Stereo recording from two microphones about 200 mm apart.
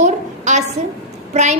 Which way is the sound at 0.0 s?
35° right (ahead or behind).